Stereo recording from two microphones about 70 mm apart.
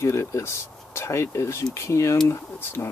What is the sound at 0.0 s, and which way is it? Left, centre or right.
Speech, left.